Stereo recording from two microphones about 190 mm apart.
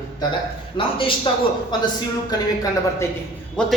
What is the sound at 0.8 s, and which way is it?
Speech, 25° left (ahead or behind).